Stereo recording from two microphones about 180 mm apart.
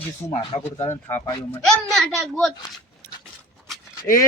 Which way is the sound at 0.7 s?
15° left (ahead or behind).